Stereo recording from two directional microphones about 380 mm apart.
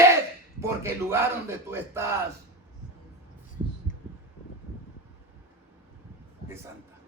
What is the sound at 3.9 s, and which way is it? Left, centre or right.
Heart murmur, centre.